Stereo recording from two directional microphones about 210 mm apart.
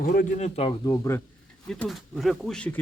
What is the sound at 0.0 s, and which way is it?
Speech, 40° left (ahead or behind).